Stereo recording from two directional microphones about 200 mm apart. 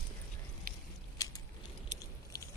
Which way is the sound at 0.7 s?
45° right (ahead or behind).